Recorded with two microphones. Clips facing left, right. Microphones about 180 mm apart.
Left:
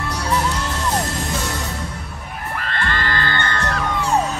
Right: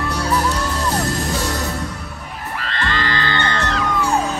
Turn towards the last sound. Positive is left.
turn(degrees=50)  # may be behind; listen again after turning